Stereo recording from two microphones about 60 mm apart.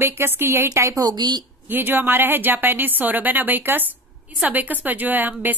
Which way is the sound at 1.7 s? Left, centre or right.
Right.